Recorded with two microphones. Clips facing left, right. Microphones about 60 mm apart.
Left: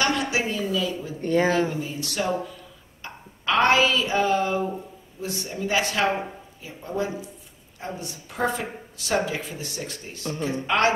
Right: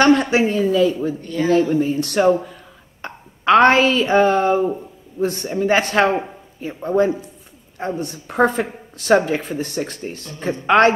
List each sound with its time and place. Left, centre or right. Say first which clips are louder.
0.0 s speech: right 10 dB; right
1.2 s speech: left 5 dB; left
1.7 s a woman's voice: right 12 dB; right